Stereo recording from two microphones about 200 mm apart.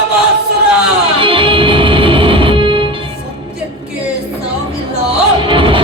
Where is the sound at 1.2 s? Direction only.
25° right (ahead or behind).